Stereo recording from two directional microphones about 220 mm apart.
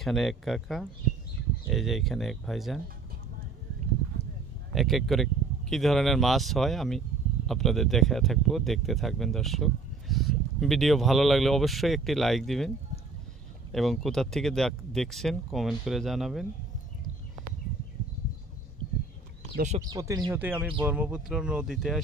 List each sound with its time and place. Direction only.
0.0 s speech: centre (ahead or behind)
4.7 s speech: centre (ahead or behind)
19.5 s speech: 35° right (ahead or behind)
19.8 s speech: 15° right (ahead or behind)
20.3 s speech: 5° right (ahead or behind)